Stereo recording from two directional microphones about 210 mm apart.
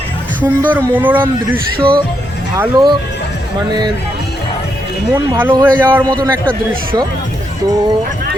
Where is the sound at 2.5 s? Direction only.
15° right (ahead or behind).